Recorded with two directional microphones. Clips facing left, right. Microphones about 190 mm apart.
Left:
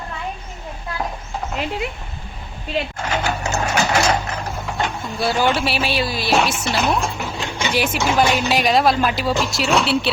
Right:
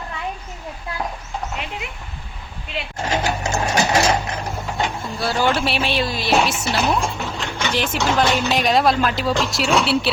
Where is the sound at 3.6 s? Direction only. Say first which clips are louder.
Right 1 dB; 20° right (ahead or behind).